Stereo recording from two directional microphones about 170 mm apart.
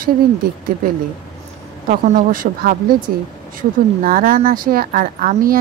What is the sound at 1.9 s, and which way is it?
A woman's voice, 50° right (ahead or behind).